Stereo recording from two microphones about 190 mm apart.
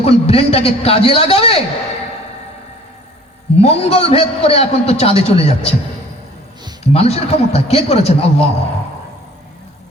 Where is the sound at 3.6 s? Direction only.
30° left (ahead or behind).